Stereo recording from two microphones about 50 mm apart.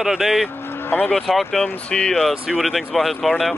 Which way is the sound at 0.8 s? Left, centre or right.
Left.